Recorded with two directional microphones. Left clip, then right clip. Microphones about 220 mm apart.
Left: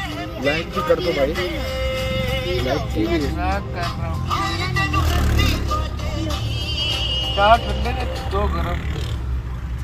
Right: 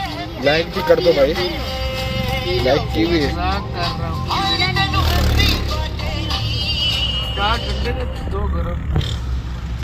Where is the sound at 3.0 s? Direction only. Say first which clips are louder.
Right 4 dB; 5° right (ahead or behind).